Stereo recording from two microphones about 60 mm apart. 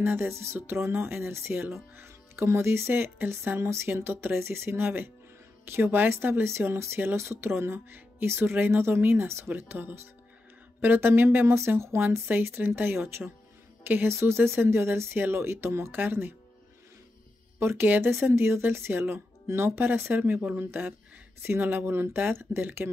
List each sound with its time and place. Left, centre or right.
0.0 s speech: right
7.2 s speech: right
12.3 s speech: right
17.6 s speech: right